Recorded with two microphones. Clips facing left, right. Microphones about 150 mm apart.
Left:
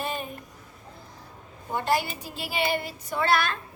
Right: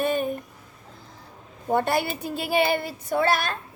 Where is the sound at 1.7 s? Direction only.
55° right (ahead or behind).